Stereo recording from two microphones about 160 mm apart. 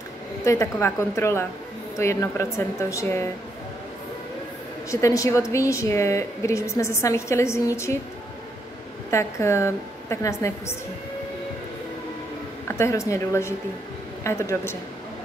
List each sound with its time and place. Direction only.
0.4 s a woman's voice: 20° left (ahead or behind)
5.0 s a woman's voice: 20° left (ahead or behind)
9.1 s a woman's voice: 15° left (ahead or behind)
12.6 s a woman's voice: 15° left (ahead or behind)